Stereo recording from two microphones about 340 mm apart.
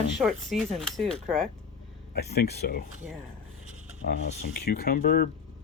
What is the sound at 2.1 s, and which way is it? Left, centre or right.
Speech, left.